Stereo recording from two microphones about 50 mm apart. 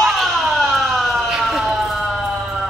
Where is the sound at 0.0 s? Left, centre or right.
Centre.